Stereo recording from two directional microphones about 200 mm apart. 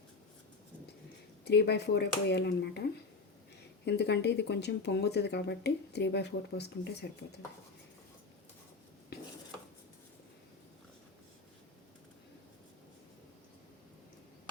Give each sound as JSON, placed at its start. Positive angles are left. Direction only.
{"t": 1.5, "sound": "speech", "side_deg": 55}
{"t": 3.8, "sound": "speech", "side_deg": 55}